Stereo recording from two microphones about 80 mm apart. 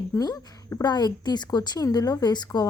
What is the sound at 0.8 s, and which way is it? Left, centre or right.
Speech, left.